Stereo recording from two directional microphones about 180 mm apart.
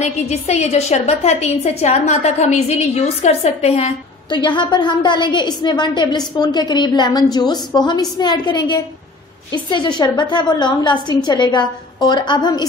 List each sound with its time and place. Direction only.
0.0 s a woman's voice: 40° left (ahead or behind)